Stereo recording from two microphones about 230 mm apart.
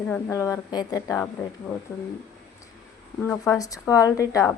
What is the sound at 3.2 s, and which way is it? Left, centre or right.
A woman's voice, centre.